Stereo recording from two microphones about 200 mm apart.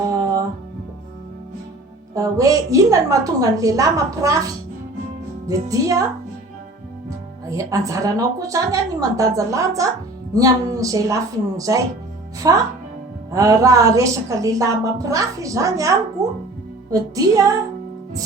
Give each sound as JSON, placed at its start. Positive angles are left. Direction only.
{"t": 2.1, "sound": "a woman's voice", "side_deg": -15}
{"t": 5.5, "sound": "a woman's voice", "side_deg": -15}
{"t": 7.5, "sound": "a woman's voice", "side_deg": -15}